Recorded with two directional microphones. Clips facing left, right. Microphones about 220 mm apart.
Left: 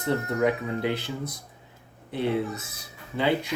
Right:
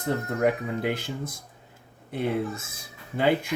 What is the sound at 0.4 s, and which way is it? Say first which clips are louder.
Speech: right 1 dB; 45° right (ahead or behind).